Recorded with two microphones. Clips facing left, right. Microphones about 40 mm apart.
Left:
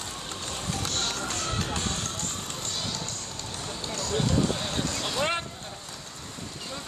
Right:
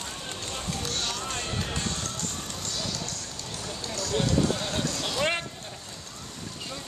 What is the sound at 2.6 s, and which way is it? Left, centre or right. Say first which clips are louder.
Music: right 1 dB; left.